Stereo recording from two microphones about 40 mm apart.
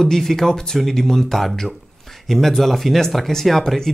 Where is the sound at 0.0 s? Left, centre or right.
Centre.